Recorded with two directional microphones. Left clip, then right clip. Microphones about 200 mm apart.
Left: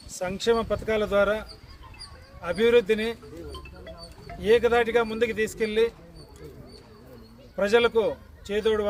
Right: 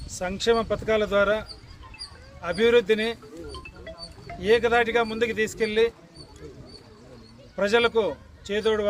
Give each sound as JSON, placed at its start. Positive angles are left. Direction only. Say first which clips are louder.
{"t": 0.2, "sound": "speech", "louder": "right 1 dB", "side_deg": 5}
{"t": 7.5, "sound": "a man's voice", "louder": "even", "side_deg": 5}